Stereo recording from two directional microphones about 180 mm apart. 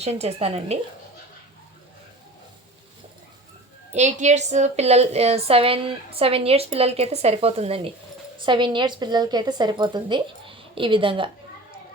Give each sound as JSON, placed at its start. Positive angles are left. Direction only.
{"t": 0.0, "sound": "a woman's voice", "side_deg": -35}
{"t": 3.9, "sound": "a woman's voice", "side_deg": -40}